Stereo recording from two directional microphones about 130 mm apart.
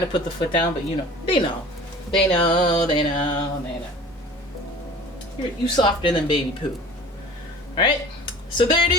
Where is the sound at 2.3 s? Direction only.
35° left (ahead or behind).